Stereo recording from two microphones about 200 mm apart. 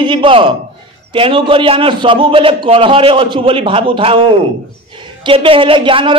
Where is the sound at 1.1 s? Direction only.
25° right (ahead or behind).